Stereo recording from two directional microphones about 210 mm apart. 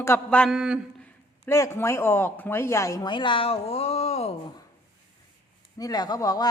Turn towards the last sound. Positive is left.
turn(degrees=20)  # may be behind; listen again after turning